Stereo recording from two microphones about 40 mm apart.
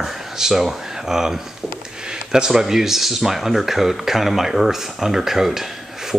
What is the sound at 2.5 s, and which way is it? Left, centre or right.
Speech, centre.